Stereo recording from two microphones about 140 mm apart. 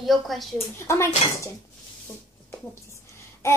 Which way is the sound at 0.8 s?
20° left (ahead or behind).